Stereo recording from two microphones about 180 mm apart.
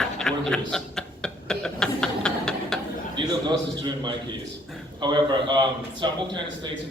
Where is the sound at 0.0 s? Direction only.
5° left (ahead or behind).